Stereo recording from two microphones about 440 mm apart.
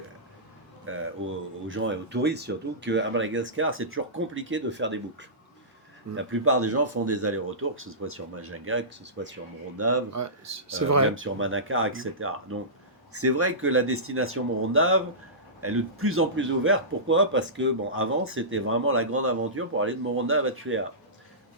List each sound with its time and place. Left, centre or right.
0.9 s a man's voice: right
6.1 s a man's voice: right